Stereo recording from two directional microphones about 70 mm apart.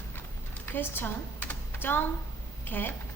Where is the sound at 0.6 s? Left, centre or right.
Left.